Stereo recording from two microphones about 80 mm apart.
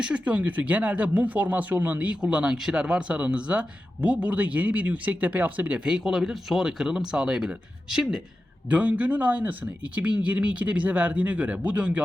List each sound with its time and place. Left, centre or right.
0.0 s speech: centre